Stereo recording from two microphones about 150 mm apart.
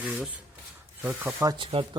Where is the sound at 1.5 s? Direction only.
35° right (ahead or behind).